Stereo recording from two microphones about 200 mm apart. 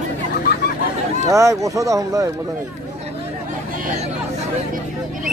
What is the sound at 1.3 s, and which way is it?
Speech, 15° right (ahead or behind).